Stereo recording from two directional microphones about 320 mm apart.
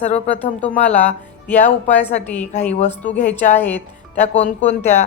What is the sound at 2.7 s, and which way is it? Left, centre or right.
Speech, centre.